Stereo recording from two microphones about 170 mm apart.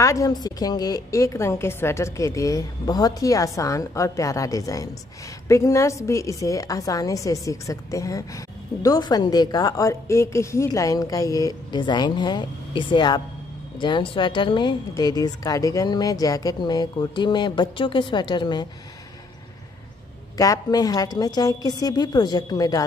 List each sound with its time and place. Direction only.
0.0 s a woman's voice: 20° left (ahead or behind)
20.3 s a woman's voice: 20° left (ahead or behind)